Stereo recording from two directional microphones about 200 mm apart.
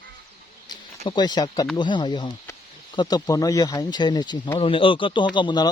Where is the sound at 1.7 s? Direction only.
25° left (ahead or behind).